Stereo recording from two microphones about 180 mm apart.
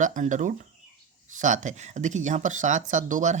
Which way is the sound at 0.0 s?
45° right (ahead or behind).